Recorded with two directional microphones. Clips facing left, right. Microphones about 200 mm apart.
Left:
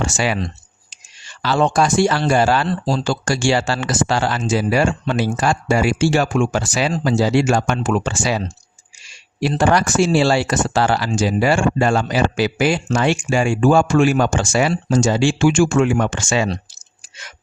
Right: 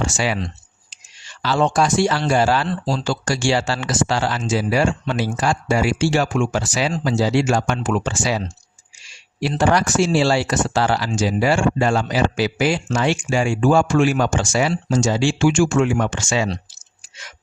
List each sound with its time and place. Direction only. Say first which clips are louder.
0.0 s speech: left 2 dB; 55° left (ahead or behind)